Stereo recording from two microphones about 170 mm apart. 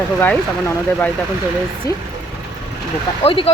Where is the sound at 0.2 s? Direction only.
10° left (ahead or behind).